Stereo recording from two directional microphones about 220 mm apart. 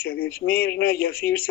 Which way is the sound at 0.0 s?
45° left (ahead or behind).